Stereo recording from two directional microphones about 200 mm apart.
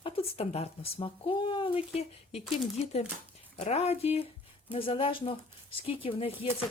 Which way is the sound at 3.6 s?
30° left (ahead or behind).